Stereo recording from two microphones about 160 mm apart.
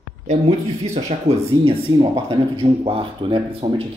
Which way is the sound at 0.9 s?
40° right (ahead or behind).